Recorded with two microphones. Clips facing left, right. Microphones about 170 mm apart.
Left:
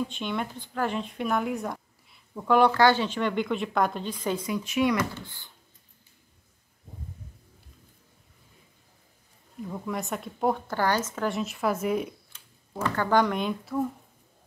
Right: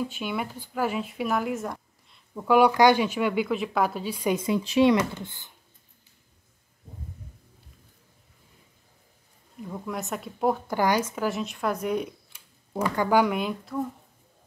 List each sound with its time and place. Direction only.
0.0 s speech: 5° right (ahead or behind)
4.4 s speech: 30° right (ahead or behind)
9.7 s a woman's voice: centre (ahead or behind)
10.7 s a woman's voice: 10° right (ahead or behind)
12.3 s speech: 15° right (ahead or behind)